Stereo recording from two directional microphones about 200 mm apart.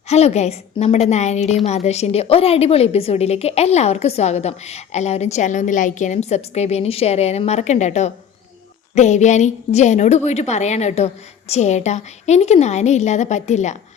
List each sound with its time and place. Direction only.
0.1 s a woman's voice: 30° left (ahead or behind)